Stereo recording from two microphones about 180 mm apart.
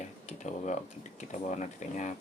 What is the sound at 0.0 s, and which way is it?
Tick-tock, 40° left (ahead or behind).